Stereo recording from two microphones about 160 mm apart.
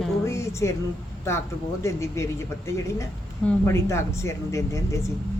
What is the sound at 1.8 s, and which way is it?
Speech, 20° left (ahead or behind).